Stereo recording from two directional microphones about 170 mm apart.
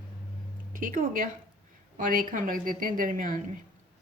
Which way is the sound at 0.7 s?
50° right (ahead or behind).